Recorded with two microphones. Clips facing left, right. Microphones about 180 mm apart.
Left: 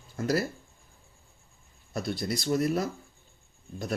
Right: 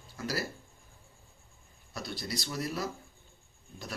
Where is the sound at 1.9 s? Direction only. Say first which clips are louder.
Left 7 dB; 50° left (ahead or behind).